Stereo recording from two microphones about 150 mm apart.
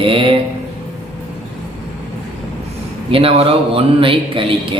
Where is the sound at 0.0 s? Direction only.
35° right (ahead or behind).